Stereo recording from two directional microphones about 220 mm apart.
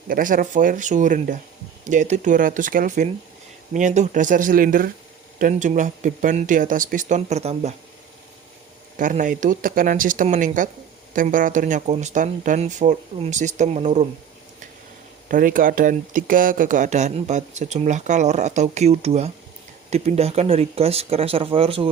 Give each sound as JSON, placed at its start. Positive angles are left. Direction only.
{"t": 0.1, "sound": "speech", "side_deg": -40}
{"t": 9.0, "sound": "speech", "side_deg": -35}
{"t": 15.3, "sound": "speech", "side_deg": -40}